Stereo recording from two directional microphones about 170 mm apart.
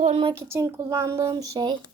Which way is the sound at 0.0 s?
35° right (ahead or behind).